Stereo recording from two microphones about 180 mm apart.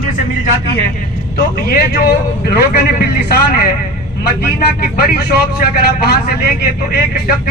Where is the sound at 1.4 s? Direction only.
55° left (ahead or behind).